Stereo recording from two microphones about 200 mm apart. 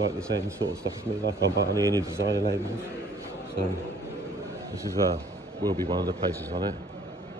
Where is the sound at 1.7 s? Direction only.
15° right (ahead or behind).